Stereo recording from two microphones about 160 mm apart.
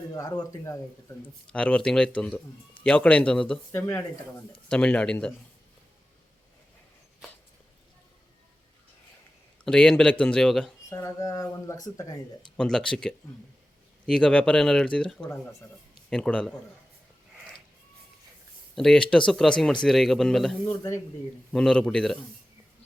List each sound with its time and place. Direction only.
0.1 s speech: 25° left (ahead or behind)
1.2 s a man's voice: 10° left (ahead or behind)
9.6 s speech: 5° left (ahead or behind)
10.8 s speech: 20° left (ahead or behind)
12.5 s speech: 5° left (ahead or behind)
18.7 s speech: 5° left (ahead or behind)